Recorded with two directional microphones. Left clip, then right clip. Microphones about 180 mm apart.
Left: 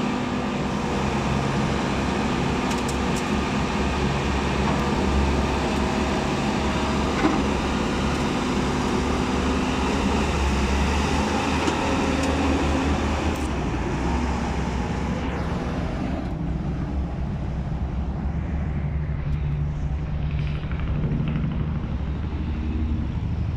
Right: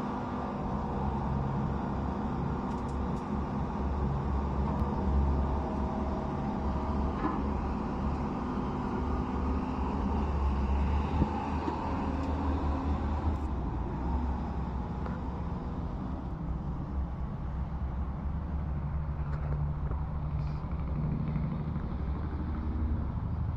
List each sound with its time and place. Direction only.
0.0 s vehicle: 45° left (ahead or behind)